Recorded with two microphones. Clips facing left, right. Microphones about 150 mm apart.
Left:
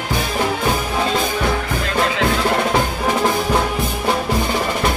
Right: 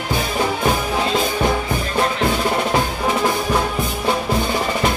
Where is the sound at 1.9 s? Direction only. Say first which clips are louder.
Left 2 dB; 90° left.